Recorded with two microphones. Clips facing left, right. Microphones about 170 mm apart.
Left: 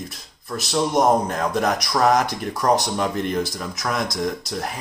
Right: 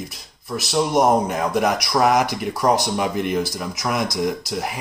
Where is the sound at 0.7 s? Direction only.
5° right (ahead or behind).